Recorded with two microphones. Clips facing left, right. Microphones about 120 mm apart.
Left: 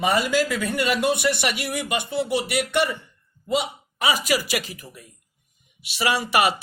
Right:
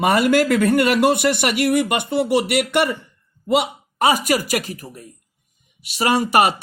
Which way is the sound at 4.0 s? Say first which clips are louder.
Right 5 dB; 45° right (ahead or behind).